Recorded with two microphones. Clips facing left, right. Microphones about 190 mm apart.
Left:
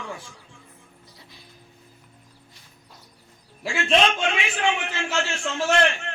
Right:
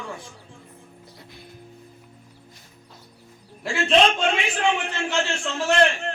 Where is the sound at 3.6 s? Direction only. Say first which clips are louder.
Right 2 dB; 35° right (ahead or behind).